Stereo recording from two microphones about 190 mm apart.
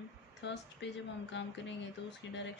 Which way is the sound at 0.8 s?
70° left (ahead or behind).